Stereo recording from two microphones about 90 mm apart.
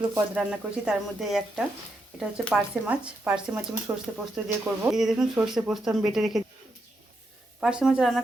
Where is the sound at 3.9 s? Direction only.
25° right (ahead or behind).